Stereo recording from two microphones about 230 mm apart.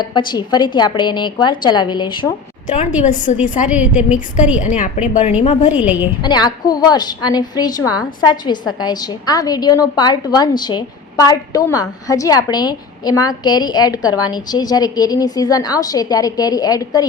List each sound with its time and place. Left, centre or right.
0.1 s a woman's voice: centre
3.7 s a woman's voice: centre
4.6 s a woman's voice: left
5.7 s a woman's voice: centre
6.2 s a woman's voice: centre